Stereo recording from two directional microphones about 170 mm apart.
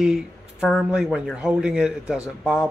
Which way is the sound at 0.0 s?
5° right (ahead or behind).